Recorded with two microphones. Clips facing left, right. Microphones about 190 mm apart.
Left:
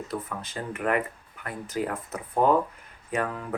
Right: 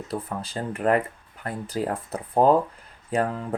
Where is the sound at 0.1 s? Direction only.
35° right (ahead or behind).